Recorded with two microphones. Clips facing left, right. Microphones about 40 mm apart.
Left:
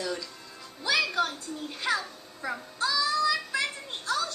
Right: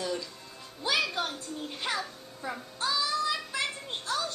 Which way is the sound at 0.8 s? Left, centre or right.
Right.